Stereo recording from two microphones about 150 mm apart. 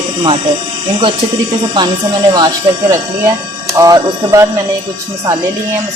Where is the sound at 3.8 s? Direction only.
20° right (ahead or behind).